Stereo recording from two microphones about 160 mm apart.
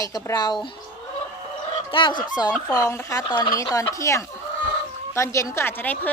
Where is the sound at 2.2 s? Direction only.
25° left (ahead or behind).